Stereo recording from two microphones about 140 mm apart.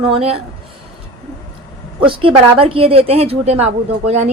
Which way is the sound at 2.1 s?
40° right (ahead or behind).